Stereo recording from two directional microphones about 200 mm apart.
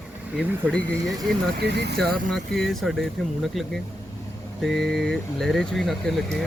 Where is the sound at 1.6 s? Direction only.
60° right (ahead or behind).